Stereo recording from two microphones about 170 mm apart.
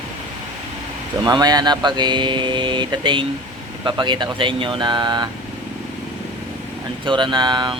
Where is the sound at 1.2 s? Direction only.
25° right (ahead or behind).